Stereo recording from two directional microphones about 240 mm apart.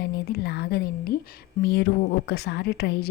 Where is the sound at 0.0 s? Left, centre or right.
Left.